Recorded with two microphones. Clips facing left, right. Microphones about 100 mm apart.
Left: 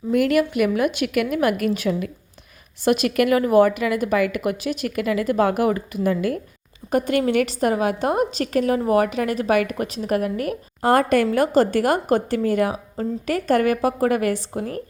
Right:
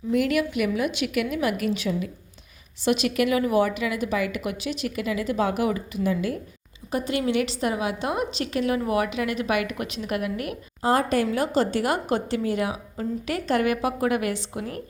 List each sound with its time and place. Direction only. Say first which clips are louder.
0.1 s speech: left 4 dB; 50° left (ahead or behind)
10.8 s speech: left 5 dB; 60° left (ahead or behind); by 14.8 s 45° left (ahead or behind)